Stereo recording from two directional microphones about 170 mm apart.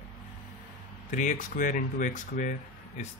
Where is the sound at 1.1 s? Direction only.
50° left (ahead or behind).